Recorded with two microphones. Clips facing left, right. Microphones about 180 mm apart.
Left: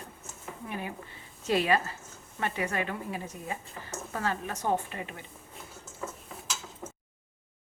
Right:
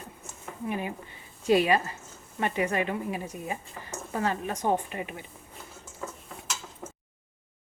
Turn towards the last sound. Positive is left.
turn(degrees=0)  # may be behind; listen again after turning